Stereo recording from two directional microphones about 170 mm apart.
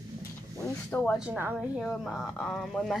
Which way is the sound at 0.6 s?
10° left (ahead or behind).